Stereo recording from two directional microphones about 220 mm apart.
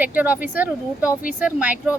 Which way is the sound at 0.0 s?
10° right (ahead or behind).